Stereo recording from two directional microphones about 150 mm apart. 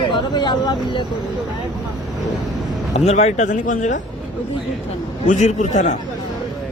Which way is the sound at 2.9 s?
50° left (ahead or behind).